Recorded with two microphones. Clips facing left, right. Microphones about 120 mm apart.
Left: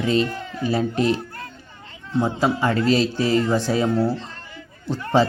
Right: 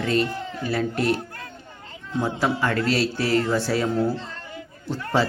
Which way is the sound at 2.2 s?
15° left (ahead or behind).